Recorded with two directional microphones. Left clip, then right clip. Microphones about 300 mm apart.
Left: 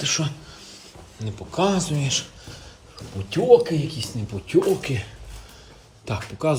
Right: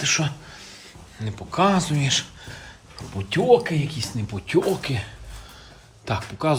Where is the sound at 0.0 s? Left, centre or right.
Centre.